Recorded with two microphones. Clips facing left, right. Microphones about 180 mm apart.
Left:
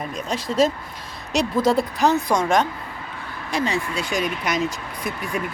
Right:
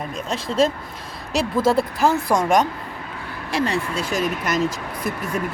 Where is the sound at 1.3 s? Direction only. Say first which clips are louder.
Even; centre (ahead or behind).